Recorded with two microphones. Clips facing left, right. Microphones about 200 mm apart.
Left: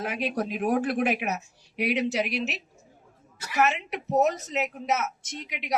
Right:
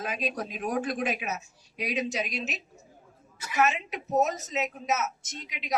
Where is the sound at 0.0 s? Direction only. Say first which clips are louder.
Left 4 dB; 65° left (ahead or behind).